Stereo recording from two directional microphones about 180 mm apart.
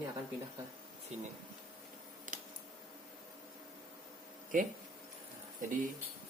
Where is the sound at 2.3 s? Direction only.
45° right (ahead or behind).